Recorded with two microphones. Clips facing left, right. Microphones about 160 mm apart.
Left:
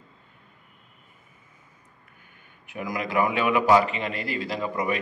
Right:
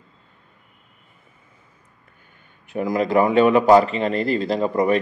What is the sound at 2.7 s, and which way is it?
A man's voice, 35° right (ahead or behind).